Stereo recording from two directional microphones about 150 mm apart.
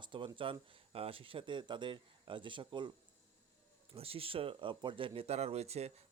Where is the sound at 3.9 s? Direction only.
40° right (ahead or behind).